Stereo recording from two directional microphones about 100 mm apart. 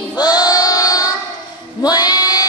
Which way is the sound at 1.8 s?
40° left (ahead or behind).